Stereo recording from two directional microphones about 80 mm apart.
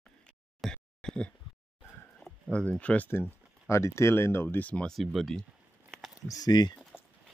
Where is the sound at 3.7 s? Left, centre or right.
Left.